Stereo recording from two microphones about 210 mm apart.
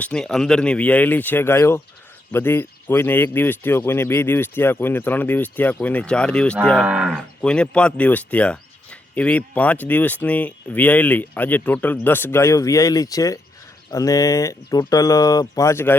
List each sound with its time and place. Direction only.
0.0 s speech: 5° left (ahead or behind)